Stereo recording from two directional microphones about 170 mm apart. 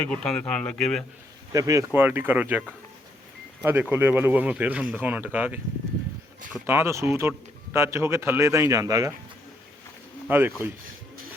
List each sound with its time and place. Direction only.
0.1 s speech: 5° left (ahead or behind)
1.5 s speech: 20° right (ahead or behind)
10.2 s speech: 10° right (ahead or behind)